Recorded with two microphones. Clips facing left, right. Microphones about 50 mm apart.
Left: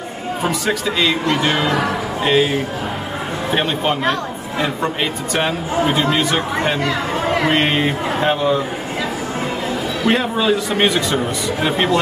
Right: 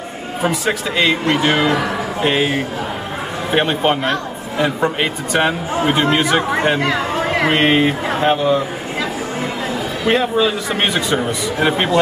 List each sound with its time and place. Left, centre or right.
0.4 s a man's voice: centre
0.9 s speech: right
3.5 s a man's voice: right
5.9 s a man's voice: right; by 8.5 s centre
10.0 s a man's voice: centre
10.8 s a man's voice: centre